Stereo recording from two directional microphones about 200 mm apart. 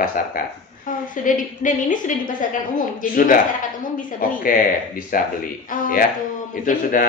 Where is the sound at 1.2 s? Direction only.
40° left (ahead or behind).